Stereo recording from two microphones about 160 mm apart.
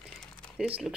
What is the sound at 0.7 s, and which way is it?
Speech, 5° right (ahead or behind).